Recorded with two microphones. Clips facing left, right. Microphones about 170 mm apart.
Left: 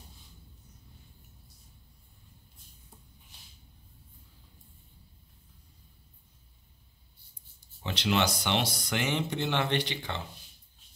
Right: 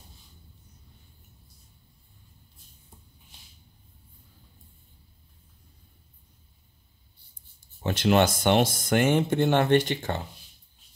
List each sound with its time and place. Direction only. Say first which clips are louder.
7.8 s speech: right 7 dB; 50° right (ahead or behind)